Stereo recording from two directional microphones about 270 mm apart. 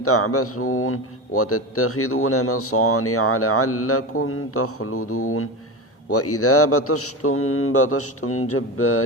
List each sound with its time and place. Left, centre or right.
0.0 s a man's voice: left